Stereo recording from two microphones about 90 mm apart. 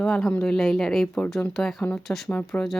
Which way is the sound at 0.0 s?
10° left (ahead or behind).